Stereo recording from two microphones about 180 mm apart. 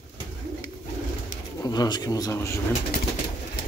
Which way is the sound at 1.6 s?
25° left (ahead or behind).